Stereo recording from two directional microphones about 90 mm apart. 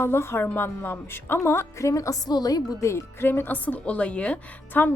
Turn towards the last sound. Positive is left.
turn(degrees=20)  # may be behind; listen again after turning